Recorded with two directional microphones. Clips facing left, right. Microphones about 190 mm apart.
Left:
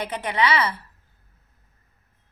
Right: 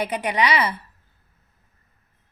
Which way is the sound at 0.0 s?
15° right (ahead or behind).